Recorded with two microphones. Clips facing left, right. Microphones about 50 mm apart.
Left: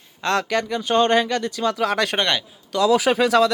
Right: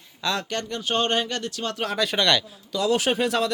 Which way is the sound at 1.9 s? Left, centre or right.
Left.